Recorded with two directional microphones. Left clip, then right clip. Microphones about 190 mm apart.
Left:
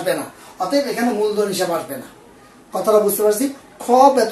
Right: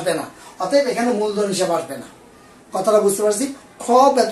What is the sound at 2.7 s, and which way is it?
Speech, 20° right (ahead or behind).